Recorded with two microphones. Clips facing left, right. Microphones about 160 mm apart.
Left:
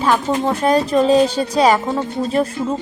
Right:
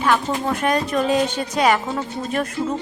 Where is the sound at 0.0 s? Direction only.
30° left (ahead or behind).